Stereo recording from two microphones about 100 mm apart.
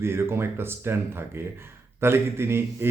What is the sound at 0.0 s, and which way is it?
A man's voice, 25° right (ahead or behind).